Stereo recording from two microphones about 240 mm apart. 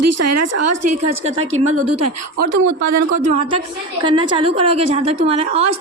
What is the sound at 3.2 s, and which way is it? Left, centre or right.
Speech, right.